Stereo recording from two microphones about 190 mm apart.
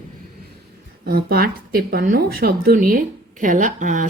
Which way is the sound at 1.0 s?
55° right (ahead or behind).